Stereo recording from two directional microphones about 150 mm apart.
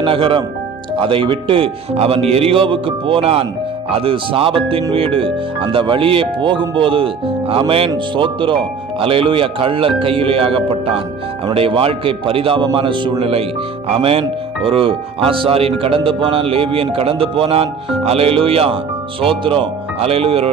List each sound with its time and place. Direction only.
0.0 s speech: 35° right (ahead or behind)